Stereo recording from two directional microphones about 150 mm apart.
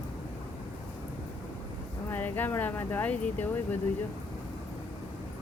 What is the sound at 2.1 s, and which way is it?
Speech, 10° left (ahead or behind).